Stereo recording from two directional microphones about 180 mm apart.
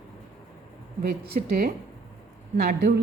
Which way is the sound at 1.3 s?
45° right (ahead or behind).